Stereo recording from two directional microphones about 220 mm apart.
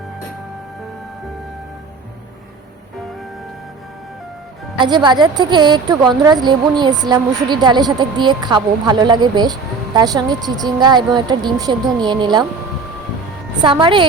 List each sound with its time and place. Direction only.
4.8 s speech: 20° right (ahead or behind)
13.6 s speech: 20° right (ahead or behind)